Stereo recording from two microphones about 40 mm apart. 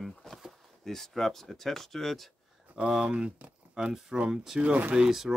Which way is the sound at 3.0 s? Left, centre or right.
Right.